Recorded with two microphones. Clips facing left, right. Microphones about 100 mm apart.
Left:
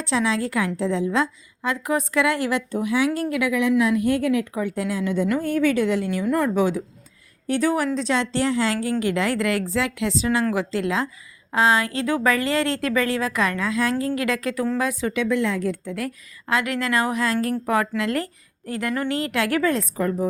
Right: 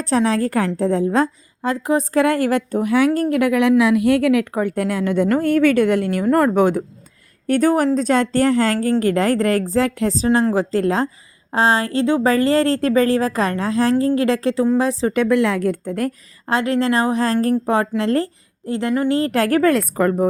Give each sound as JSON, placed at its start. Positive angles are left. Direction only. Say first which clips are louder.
{"t": 0.0, "sound": "a woman's voice", "louder": "right 5 dB", "side_deg": -45}
{"t": 4.6, "sound": "a woman's voice", "louder": "right 5 dB", "side_deg": -55}
{"t": 15.1, "sound": "a woman's voice", "louder": "right 6 dB", "side_deg": -55}
{"t": 19.6, "sound": "a woman's voice", "louder": "right 6 dB", "side_deg": -65}